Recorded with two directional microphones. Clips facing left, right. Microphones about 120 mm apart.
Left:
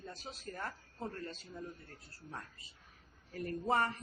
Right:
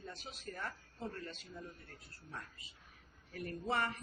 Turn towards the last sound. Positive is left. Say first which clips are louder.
# left 4 dB
turn(degrees=40)  # may be behind; listen again after turning